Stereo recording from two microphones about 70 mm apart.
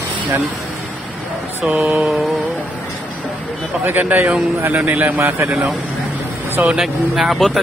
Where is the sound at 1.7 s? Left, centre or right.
Right.